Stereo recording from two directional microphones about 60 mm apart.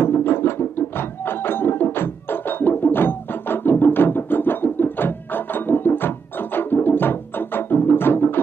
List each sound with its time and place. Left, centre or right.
0.0 s music: left